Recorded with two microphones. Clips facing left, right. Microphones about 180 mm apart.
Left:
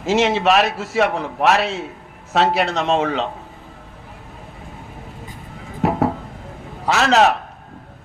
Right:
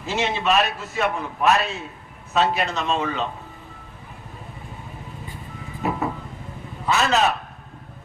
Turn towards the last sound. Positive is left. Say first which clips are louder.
# left 5 dB
turn(degrees=90)